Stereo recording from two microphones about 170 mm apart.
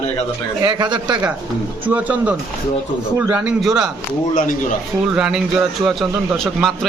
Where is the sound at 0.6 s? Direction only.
25° right (ahead or behind).